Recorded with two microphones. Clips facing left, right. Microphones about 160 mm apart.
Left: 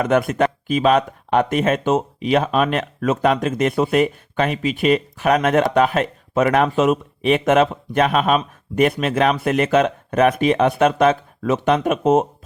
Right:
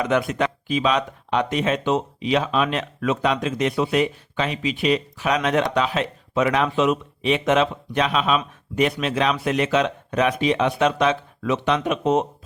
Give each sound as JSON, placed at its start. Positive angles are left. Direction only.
{"t": 0.0, "sound": "speech", "side_deg": 50}